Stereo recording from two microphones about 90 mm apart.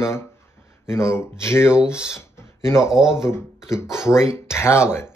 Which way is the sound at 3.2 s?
30° left (ahead or behind).